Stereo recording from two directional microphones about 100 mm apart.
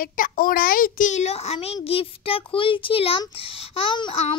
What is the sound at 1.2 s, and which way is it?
A child's voice, 90° left.